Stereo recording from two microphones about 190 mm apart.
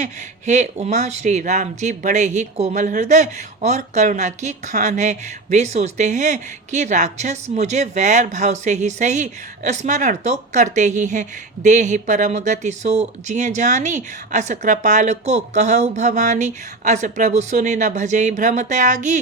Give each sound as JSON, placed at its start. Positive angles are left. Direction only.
{"t": 0.0, "sound": "speech", "side_deg": -40}